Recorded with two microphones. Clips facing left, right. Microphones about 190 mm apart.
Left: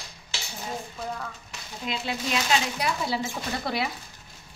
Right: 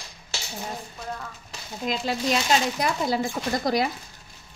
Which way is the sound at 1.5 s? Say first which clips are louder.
Right 7 dB; 40° right (ahead or behind).